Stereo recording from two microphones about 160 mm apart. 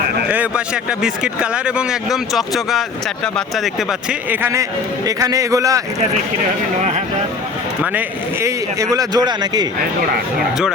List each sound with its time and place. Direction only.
0.3 s speech: 10° right (ahead or behind)
4.3 s speech: 10° right (ahead or behind)
7.8 s speech: 15° right (ahead or behind)